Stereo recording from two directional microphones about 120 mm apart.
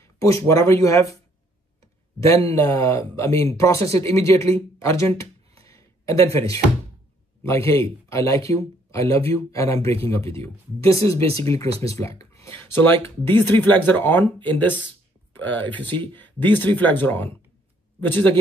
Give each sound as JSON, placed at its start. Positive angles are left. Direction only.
{"t": 0.0, "sound": "speech", "side_deg": 25}
{"t": 2.1, "sound": "speech", "side_deg": 25}
{"t": 4.6, "sound": "a sound", "side_deg": 20}
{"t": 7.4, "sound": "speech", "side_deg": 20}